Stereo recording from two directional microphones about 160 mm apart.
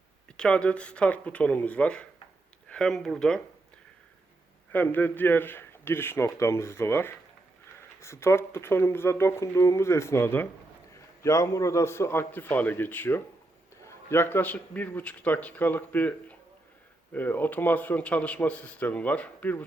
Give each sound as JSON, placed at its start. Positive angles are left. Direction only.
{"t": 0.3, "sound": "a man's voice", "side_deg": 5}
{"t": 4.7, "sound": "a man's voice", "side_deg": 10}